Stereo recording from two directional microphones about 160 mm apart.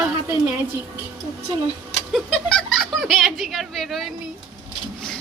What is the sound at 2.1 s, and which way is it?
Speech, 5° left (ahead or behind).